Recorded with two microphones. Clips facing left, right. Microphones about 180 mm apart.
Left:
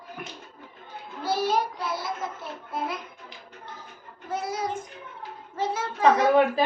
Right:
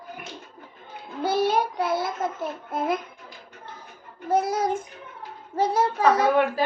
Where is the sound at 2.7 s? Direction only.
50° right (ahead or behind).